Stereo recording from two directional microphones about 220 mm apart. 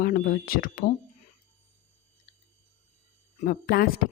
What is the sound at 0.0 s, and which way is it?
Speech, 40° left (ahead or behind).